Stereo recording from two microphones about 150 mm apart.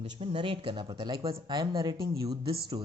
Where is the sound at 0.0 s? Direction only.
40° right (ahead or behind).